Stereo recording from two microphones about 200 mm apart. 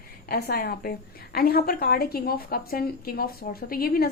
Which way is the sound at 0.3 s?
50° left (ahead or behind).